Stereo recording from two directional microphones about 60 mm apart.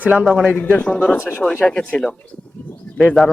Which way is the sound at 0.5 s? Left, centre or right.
Left.